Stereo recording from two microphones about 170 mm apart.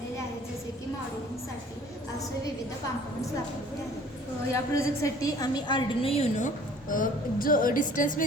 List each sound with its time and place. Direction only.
4.5 s a woman's voice: 20° left (ahead or behind); by 6.5 s 40° left (ahead or behind)
6.9 s a woman's voice: 55° left (ahead or behind)